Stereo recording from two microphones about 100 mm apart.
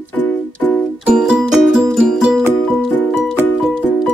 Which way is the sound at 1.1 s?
5° right (ahead or behind).